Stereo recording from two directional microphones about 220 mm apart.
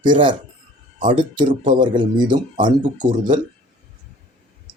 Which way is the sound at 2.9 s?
20° right (ahead or behind).